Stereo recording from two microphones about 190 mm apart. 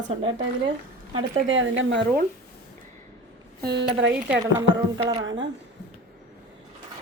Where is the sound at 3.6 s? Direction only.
60° right (ahead or behind).